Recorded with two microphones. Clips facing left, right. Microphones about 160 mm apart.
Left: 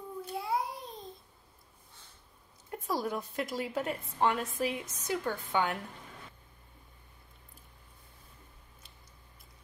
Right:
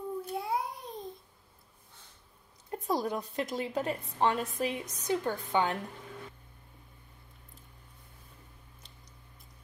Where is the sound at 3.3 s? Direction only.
25° right (ahead or behind).